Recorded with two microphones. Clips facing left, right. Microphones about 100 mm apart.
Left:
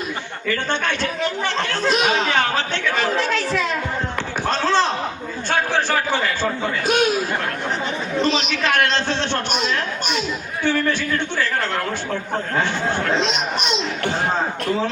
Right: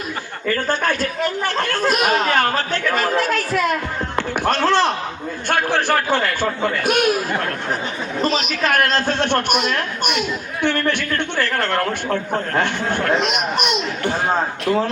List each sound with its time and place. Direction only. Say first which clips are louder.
0.4 s speech: right 3 dB; 40° right (ahead or behind); by 13.8 s 55° right (ahead or behind)